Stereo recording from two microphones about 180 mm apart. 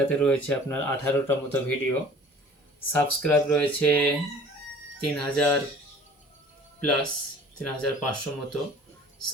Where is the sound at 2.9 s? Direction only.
10° left (ahead or behind).